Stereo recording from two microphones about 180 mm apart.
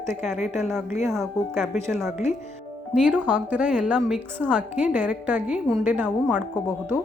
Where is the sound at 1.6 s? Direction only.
Centre (ahead or behind).